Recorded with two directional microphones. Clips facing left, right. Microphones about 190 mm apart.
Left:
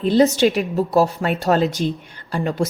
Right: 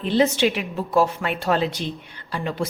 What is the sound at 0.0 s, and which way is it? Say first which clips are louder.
A woman's voice: left 4 dB; 40° left (ahead or behind).